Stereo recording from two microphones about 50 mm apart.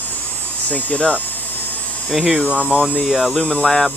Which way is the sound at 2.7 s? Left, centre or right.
Right.